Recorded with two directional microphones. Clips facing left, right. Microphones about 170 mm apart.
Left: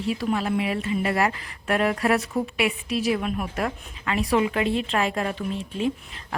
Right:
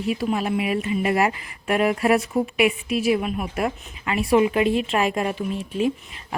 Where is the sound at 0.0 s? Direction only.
10° right (ahead or behind).